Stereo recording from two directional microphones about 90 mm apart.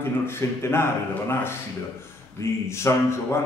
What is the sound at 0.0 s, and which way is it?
A man's voice, 30° left (ahead or behind).